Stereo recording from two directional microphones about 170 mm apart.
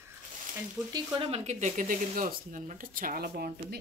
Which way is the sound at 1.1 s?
35° right (ahead or behind).